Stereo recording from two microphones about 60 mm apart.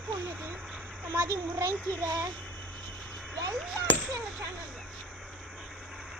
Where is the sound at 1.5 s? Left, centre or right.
Right.